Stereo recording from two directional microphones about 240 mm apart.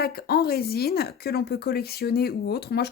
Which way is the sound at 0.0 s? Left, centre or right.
Left.